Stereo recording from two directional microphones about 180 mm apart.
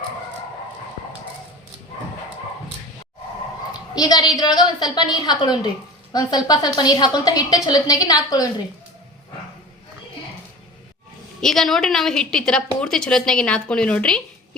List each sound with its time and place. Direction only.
3.7 s a woman's voice: 20° left (ahead or behind)
11.3 s a woman's voice: centre (ahead or behind)